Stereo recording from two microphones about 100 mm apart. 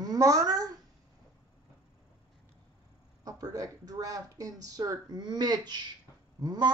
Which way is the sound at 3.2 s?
35° right (ahead or behind).